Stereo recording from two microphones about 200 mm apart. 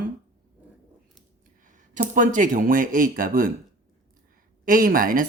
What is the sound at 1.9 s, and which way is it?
Speech, 40° right (ahead or behind).